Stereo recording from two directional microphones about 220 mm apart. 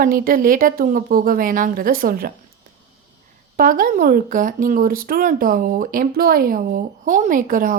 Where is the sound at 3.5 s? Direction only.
40° right (ahead or behind).